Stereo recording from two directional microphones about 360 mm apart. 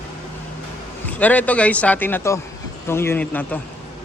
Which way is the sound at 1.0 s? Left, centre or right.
Centre.